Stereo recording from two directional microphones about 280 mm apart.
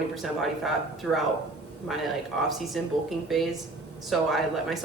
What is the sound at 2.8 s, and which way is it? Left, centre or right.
Speech, centre.